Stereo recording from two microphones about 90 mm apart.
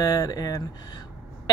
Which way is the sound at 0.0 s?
40° left (ahead or behind).